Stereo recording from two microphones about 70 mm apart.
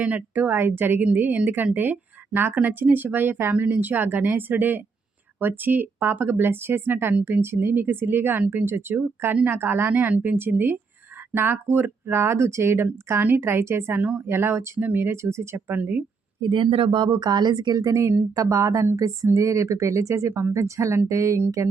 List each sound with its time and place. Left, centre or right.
0.0 s speech: right
14.8 s speech: right
15.0 s speech: right
15.5 s speech: right
17.0 s speech: right